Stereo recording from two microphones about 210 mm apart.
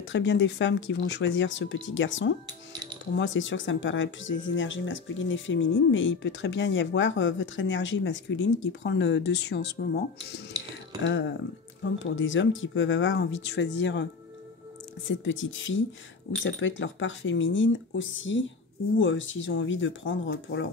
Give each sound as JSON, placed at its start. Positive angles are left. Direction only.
{"t": 0.0, "sound": "speech", "side_deg": 60}
{"t": 11.8, "sound": "speech", "side_deg": 65}
{"t": 15.0, "sound": "speech", "side_deg": 60}